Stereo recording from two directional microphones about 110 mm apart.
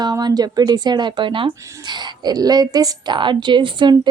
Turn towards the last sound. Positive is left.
turn(degrees=-45)  # may be behind; listen again after turning